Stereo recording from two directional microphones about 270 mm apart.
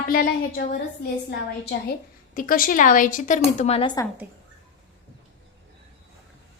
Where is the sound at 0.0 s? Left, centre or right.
Left.